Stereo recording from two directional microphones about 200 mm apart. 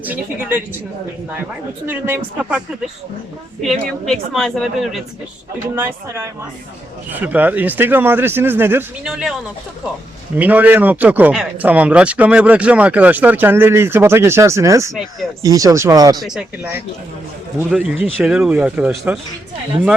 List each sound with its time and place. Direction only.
0.0 s speech: 10° right (ahead or behind)
1.9 s a woman's voice: 10° right (ahead or behind)
5.7 s speech: 10° right (ahead or behind)
10.3 s speech: 10° right (ahead or behind)
16.2 s a woman's voice: 5° right (ahead or behind)